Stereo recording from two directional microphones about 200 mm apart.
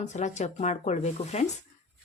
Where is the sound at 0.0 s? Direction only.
35° left (ahead or behind).